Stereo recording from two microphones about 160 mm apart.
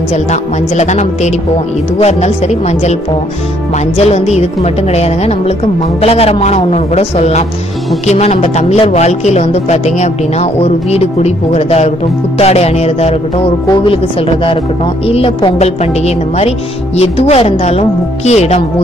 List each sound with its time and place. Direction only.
0.1 s a woman's voice: 45° left (ahead or behind)